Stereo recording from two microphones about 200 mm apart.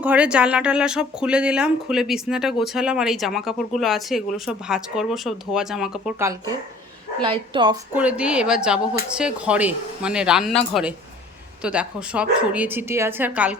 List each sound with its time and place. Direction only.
0.0 s speech: 5° right (ahead or behind)
7.2 s a woman's voice: 25° right (ahead or behind)
7.9 s speech: 5° right (ahead or behind)